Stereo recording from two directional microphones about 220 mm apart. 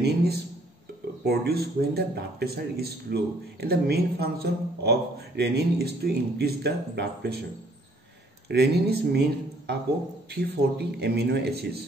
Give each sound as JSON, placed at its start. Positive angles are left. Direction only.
{"t": 0.0, "sound": "speech", "side_deg": -45}
{"t": 8.5, "sound": "speech", "side_deg": -50}
{"t": 10.3, "sound": "speech", "side_deg": -45}